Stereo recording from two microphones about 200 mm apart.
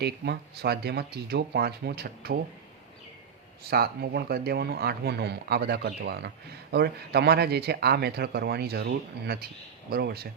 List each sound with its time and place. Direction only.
0.0 s speech: 55° right (ahead or behind)
3.7 s speech: 50° right (ahead or behind)